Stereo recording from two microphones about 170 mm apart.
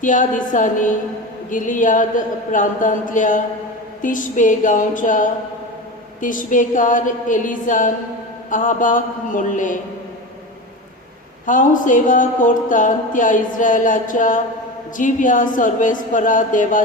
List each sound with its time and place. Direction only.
0.0 s speech: 50° left (ahead or behind)
11.4 s speech: 50° left (ahead or behind)